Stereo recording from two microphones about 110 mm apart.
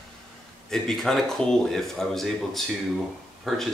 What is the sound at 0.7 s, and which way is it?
Speech, 5° left (ahead or behind).